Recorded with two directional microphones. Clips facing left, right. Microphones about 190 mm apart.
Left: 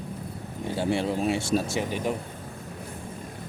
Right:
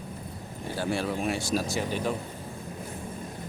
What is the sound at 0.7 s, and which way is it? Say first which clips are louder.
Speech: left 3 dB; 25° left (ahead or behind).